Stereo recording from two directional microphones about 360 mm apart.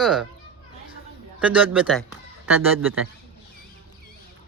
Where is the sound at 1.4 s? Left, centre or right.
Centre.